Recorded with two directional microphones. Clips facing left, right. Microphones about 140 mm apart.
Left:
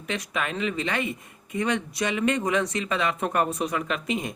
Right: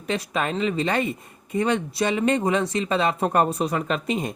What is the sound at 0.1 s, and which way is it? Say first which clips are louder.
Speech: right 4 dB; 35° right (ahead or behind).